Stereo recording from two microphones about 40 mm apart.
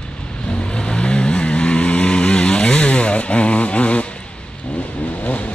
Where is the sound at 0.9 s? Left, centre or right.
Left.